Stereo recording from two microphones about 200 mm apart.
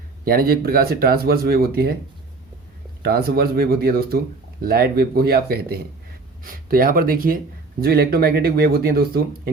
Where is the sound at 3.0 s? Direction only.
50° right (ahead or behind).